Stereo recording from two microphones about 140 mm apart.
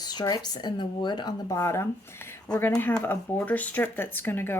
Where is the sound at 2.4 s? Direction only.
5° left (ahead or behind).